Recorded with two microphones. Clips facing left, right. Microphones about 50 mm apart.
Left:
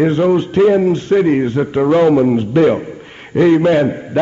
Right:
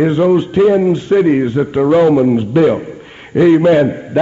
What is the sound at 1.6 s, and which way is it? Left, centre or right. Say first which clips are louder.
A man's voice: right 1 dB; centre.